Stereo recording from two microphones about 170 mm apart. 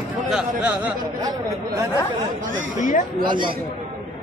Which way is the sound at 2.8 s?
50° left (ahead or behind).